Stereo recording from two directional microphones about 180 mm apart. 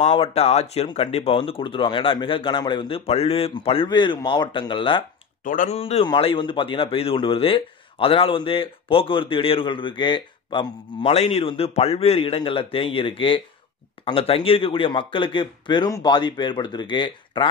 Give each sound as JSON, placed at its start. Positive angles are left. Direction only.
{"t": 0.0, "sound": "speech", "side_deg": 35}
{"t": 5.4, "sound": "speech", "side_deg": 50}
{"t": 5.8, "sound": "speech", "side_deg": 30}